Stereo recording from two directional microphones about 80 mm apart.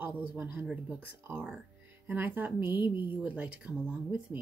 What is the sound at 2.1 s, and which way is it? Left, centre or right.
Speech, right.